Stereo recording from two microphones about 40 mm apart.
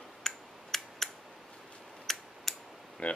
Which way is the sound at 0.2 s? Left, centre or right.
Centre.